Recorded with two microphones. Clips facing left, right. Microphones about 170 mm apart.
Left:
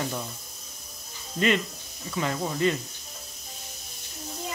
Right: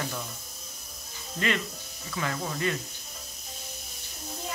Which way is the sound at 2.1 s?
20° left (ahead or behind).